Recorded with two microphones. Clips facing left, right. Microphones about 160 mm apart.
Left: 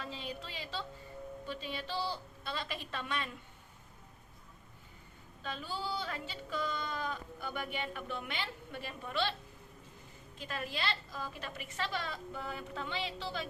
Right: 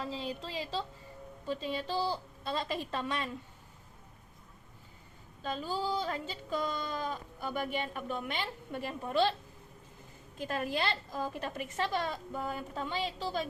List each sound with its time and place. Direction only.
0.0 s speech: 35° right (ahead or behind)
5.4 s speech: 35° right (ahead or behind)
10.3 s a woman's voice: 45° right (ahead or behind)